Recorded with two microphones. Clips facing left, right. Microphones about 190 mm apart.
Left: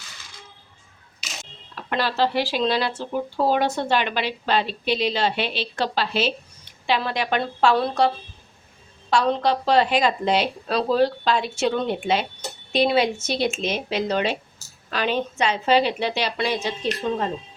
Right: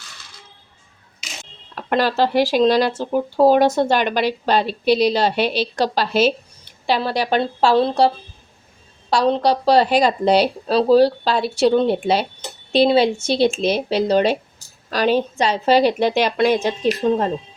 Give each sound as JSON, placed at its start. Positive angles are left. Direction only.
{"t": 1.7, "sound": "speech", "side_deg": -45}
{"t": 17.0, "sound": "speech", "side_deg": -35}